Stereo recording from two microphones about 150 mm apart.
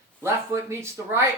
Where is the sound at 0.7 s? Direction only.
15° right (ahead or behind).